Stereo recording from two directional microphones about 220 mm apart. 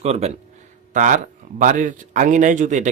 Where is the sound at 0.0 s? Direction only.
30° right (ahead or behind).